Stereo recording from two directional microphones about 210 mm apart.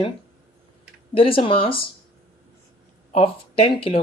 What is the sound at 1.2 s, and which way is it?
Speech, 25° left (ahead or behind).